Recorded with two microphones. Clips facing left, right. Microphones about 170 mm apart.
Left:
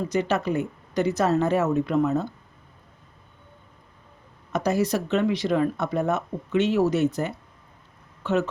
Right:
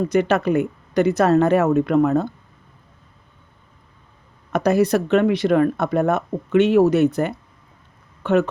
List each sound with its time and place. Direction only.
0.1 s speech: 60° right (ahead or behind)
4.5 s speech: 60° right (ahead or behind)